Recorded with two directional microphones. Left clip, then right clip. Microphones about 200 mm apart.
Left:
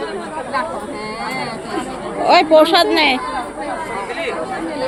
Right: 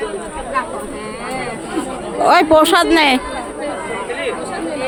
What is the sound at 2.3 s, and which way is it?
Speech, 45° right (ahead or behind).